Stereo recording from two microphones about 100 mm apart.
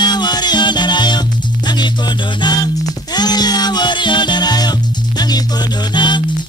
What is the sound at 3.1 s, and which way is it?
Music, 45° left (ahead or behind).